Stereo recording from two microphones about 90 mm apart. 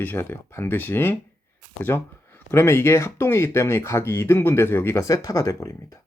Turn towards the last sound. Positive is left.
turn(degrees=40)  # may be behind; listen again after turning